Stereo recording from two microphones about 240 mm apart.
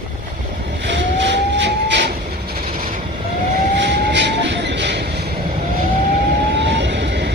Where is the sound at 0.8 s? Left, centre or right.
Right.